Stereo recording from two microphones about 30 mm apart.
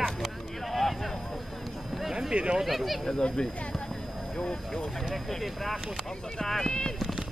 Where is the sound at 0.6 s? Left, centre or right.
Centre.